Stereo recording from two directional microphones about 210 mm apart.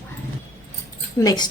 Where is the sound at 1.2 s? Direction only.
20° left (ahead or behind).